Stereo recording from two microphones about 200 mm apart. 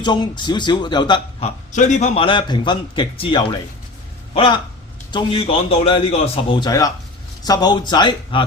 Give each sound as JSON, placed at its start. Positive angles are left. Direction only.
{"t": 0.0, "sound": "a man's voice", "side_deg": 20}
{"t": 1.7, "sound": "a man's voice", "side_deg": 35}
{"t": 6.7, "sound": "a man's voice", "side_deg": 15}